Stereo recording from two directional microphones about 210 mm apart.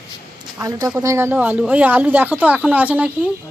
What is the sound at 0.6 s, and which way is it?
Speech, 15° right (ahead or behind).